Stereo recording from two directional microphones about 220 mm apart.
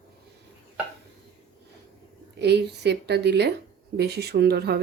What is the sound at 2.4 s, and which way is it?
Speech, 50° right (ahead or behind).